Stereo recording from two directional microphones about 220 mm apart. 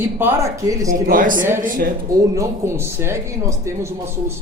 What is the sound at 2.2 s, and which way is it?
Speech, 15° right (ahead or behind).